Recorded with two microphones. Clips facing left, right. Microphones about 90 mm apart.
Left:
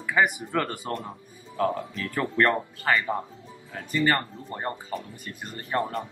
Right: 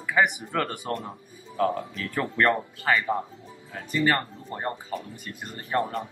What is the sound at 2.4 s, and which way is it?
Speech, 5° right (ahead or behind).